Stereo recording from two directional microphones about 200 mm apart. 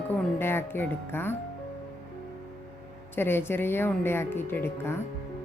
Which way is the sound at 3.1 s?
10° left (ahead or behind).